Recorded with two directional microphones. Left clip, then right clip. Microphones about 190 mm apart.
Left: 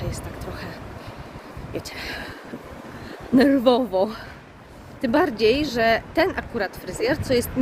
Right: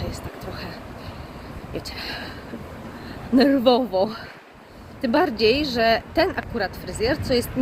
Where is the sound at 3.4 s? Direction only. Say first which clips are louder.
Even; 10° left (ahead or behind).